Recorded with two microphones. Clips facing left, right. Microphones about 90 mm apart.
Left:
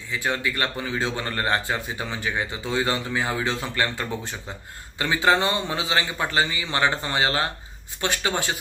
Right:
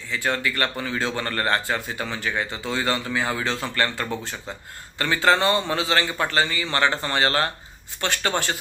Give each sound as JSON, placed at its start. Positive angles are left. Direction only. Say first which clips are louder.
{"t": 0.1, "sound": "speech", "louder": "right 1 dB", "side_deg": 15}